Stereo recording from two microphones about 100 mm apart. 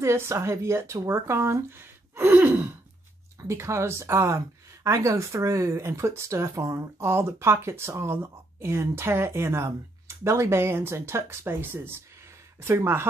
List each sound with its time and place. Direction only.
0.0 s speech: 25° right (ahead or behind)